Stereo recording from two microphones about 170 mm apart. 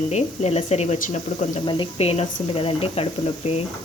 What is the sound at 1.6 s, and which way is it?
Speech, 30° left (ahead or behind).